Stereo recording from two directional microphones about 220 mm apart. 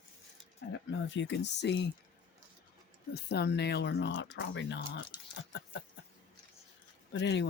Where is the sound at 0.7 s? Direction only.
55° left (ahead or behind).